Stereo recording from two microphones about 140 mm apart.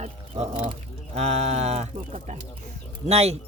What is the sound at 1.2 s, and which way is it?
Speech, 50° right (ahead or behind).